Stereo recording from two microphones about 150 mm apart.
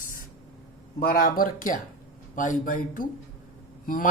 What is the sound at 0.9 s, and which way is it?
Speech, 75° left (ahead or behind).